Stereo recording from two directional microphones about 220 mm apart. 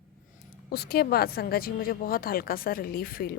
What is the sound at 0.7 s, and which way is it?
A woman's voice, 45° left (ahead or behind).